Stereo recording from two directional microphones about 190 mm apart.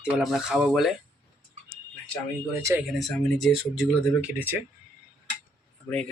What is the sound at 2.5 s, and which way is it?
Speech, 15° right (ahead or behind).